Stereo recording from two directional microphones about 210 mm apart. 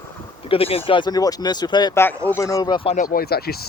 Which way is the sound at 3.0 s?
45° left (ahead or behind).